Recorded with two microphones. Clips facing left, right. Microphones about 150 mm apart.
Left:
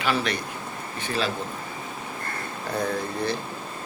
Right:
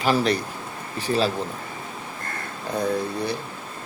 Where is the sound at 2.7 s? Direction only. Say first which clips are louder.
Right 3 dB; 15° right (ahead or behind).